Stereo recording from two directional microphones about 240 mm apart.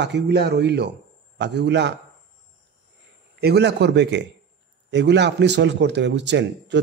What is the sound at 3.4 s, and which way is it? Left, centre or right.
A man's voice, right.